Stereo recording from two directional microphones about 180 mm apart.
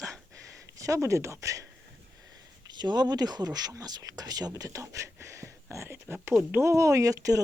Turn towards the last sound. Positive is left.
turn(degrees=-20)  # may be behind; listen again after turning